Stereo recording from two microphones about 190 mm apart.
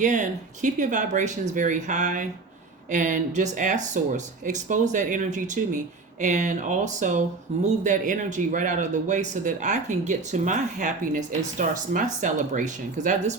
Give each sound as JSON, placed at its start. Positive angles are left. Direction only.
{"t": 0.0, "sound": "speech", "side_deg": -40}